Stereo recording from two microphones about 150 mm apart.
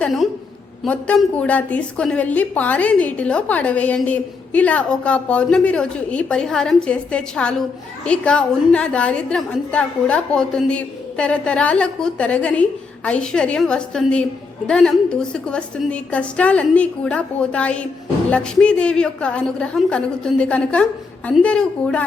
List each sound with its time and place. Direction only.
0.0 s a woman's voice: centre (ahead or behind)